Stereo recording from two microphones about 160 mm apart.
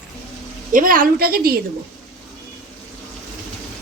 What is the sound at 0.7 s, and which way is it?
Speech, 60° right (ahead or behind).